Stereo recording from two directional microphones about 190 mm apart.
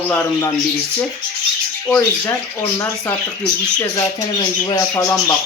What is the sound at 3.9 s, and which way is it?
Speech, 20° left (ahead or behind).